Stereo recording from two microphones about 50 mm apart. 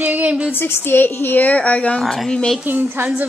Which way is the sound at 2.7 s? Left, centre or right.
Right.